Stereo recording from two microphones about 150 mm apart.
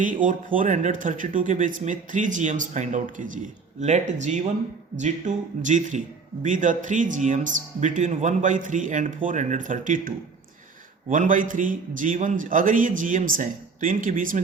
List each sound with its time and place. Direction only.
0.0 s speech: 60° right (ahead or behind)
11.1 s speech: 60° right (ahead or behind)